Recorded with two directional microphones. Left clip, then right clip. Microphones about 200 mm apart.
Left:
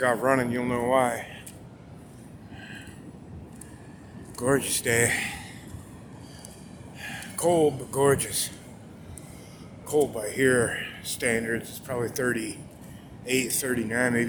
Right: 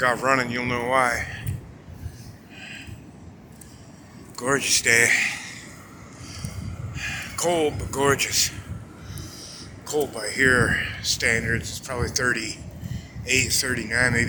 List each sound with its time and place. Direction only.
0.0 s speech: 25° left (ahead or behind)
2.6 s a sound: 25° left (ahead or behind)
4.4 s speech: 25° left (ahead or behind)
6.9 s speech: 25° left (ahead or behind)
9.8 s speech: 25° left (ahead or behind)